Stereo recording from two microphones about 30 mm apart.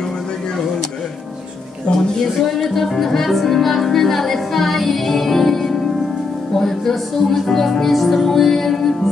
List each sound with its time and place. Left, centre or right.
2.6 s music: centre